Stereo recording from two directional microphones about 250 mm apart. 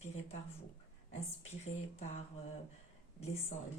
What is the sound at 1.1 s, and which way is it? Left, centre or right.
Speech, left.